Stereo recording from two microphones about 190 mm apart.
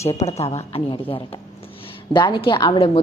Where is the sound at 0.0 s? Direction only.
35° left (ahead or behind).